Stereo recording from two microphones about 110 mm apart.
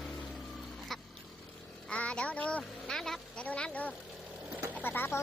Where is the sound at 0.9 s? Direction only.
Centre (ahead or behind).